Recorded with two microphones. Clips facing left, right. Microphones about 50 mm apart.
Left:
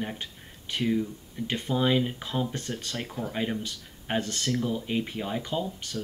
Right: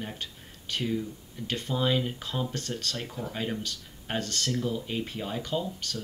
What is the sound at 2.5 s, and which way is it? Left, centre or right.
Speech, centre.